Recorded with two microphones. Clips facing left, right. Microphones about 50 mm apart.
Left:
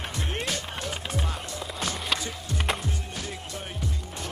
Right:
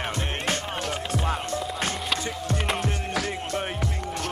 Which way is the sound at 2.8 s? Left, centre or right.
Right.